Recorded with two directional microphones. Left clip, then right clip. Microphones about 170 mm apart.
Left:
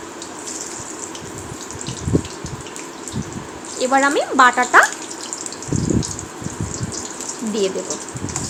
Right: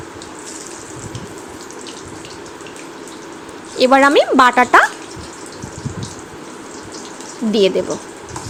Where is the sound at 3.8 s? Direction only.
50° right (ahead or behind).